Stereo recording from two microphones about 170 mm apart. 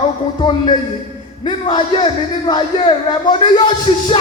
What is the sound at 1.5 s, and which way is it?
Speech, 25° left (ahead or behind).